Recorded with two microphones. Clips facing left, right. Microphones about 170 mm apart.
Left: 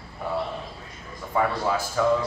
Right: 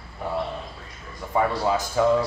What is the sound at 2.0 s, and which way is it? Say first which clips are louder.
Speech: right 2 dB; 15° right (ahead or behind).